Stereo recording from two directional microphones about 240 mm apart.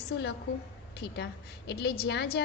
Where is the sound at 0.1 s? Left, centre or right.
Left.